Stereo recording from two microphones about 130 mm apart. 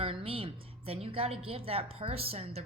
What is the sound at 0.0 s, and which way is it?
Speech, 45° right (ahead or behind).